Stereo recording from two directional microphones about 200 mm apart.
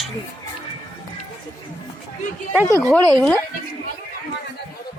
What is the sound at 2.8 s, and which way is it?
Speech, 5° left (ahead or behind).